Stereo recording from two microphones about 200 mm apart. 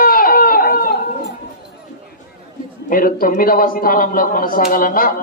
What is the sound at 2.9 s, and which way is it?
Speech, 45° left (ahead or behind).